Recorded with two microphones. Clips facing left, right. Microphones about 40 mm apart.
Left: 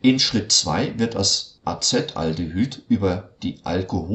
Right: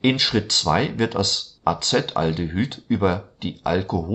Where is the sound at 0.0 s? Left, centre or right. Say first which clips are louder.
Left 2 dB; right.